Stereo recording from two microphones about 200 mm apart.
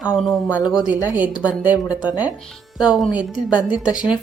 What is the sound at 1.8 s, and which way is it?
Speech, 20° left (ahead or behind).